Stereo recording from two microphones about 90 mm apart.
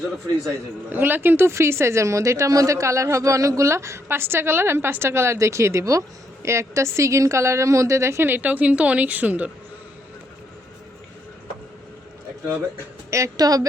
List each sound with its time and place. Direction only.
0.9 s a woman's voice: 20° right (ahead or behind)
13.1 s a woman's voice: 35° right (ahead or behind)